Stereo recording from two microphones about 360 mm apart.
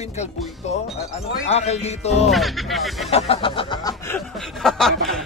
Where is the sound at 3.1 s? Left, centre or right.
Centre.